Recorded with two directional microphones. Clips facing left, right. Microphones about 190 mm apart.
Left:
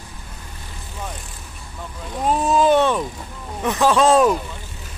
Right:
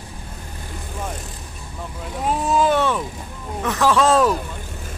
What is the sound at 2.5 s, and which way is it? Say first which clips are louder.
Vehicle: left 2 dB; 20° left (ahead or behind).